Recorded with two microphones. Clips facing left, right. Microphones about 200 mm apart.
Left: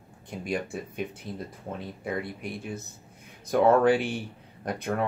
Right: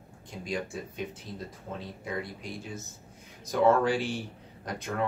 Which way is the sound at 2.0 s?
60° left (ahead or behind).